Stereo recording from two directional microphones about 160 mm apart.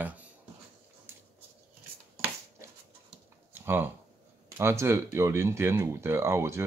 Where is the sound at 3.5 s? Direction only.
15° right (ahead or behind).